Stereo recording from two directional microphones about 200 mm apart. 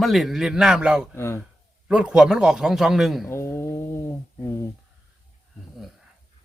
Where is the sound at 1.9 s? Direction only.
5° right (ahead or behind).